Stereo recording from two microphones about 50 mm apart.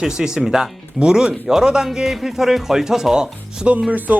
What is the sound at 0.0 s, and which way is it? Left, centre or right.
Speech, centre.